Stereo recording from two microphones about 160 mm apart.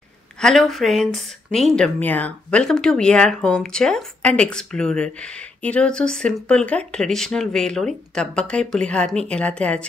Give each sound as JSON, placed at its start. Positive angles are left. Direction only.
{"t": 0.4, "sound": "speech", "side_deg": 0}